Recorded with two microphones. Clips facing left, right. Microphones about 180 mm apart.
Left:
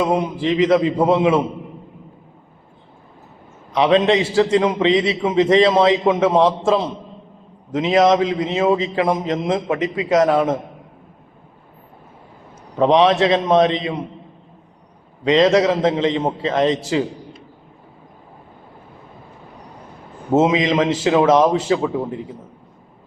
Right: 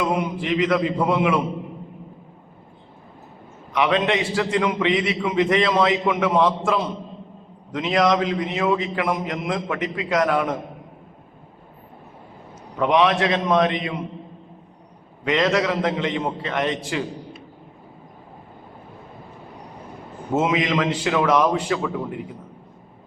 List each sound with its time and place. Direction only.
0.0 s a man's voice: 30° left (ahead or behind)
3.8 s a man's voice: 30° left (ahead or behind)
12.8 s a man's voice: 30° left (ahead or behind)
15.2 s a man's voice: 25° left (ahead or behind)
20.3 s a man's voice: 25° left (ahead or behind)